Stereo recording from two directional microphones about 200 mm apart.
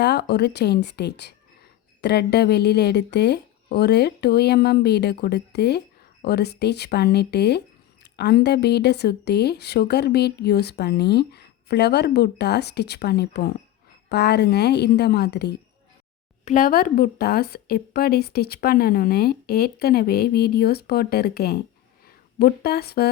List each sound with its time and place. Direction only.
0.0 s speech: 55° left (ahead or behind)
16.5 s a woman's voice: 40° left (ahead or behind)